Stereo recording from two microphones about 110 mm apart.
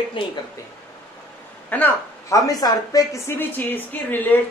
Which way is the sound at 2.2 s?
30° left (ahead or behind).